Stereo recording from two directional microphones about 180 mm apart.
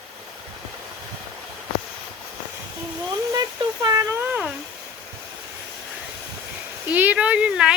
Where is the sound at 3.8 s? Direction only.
20° right (ahead or behind).